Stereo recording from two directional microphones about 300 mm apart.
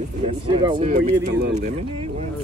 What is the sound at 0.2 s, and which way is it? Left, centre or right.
Speech, centre.